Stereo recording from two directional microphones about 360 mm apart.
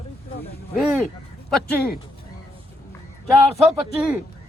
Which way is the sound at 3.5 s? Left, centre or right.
Centre.